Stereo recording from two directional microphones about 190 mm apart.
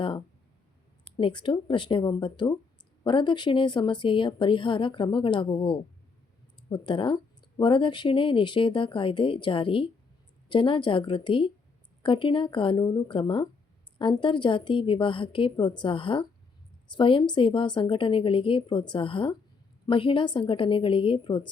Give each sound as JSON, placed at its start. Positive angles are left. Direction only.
{"t": 1.0, "sound": "a woman's voice", "side_deg": 25}